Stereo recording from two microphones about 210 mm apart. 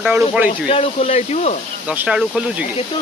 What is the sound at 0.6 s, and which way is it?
Speech, 25° left (ahead or behind).